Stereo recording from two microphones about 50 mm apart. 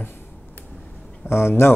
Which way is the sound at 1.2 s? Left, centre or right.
Left.